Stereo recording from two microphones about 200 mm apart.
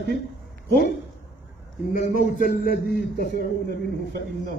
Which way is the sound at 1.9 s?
45° left (ahead or behind).